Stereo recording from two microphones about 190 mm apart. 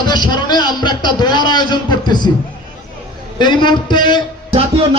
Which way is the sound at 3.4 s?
25° left (ahead or behind).